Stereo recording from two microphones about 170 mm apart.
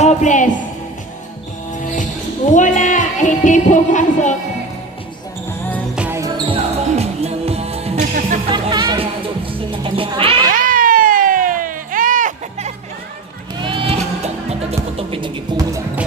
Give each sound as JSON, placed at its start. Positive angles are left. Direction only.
{"t": 0.0, "sound": "a woman's voice", "side_deg": 45}
{"t": 1.8, "sound": "music", "side_deg": 50}
{"t": 6.0, "sound": "basketball bounce", "side_deg": -15}
{"t": 6.5, "sound": "music", "side_deg": -35}
{"t": 7.9, "sound": "music", "side_deg": -55}
{"t": 8.4, "sound": "music", "side_deg": -30}
{"t": 10.5, "sound": "a sound", "side_deg": -55}
{"t": 13.6, "sound": "music", "side_deg": -30}